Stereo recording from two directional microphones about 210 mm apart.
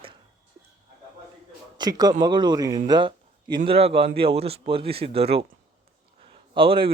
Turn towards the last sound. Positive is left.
turn(degrees=-25)  # may be behind; listen again after turning